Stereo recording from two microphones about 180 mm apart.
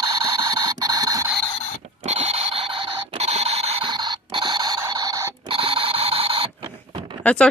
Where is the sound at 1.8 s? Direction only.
35° right (ahead or behind); by 5.5 s 20° right (ahead or behind).